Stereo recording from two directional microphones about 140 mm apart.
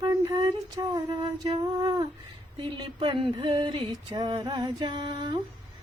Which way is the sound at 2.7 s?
35° right (ahead or behind).